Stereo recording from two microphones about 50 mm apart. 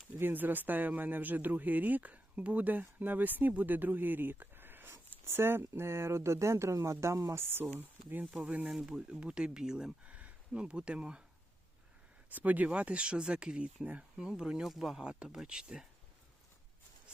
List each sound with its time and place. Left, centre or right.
0.2 s speech: right
5.2 s speech: right
7.5 s speech: right
8.4 s speech: right
10.0 s speech: right
12.3 s speech: right; by 15.0 s centre
15.0 s speech: centre